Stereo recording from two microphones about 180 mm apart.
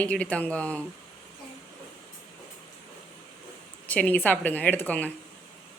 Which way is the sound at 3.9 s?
10° left (ahead or behind).